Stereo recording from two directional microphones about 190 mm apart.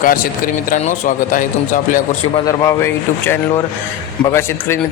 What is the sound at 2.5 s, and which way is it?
A man's voice, 15° left (ahead or behind).